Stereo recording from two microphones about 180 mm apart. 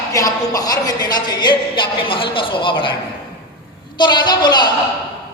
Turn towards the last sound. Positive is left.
turn(degrees=25)  # may be behind; listen again after turning